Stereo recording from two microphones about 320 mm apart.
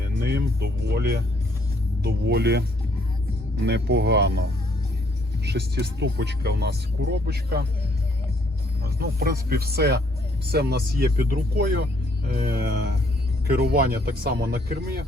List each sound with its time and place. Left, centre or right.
0.2 s speech: right
8.8 s speech: right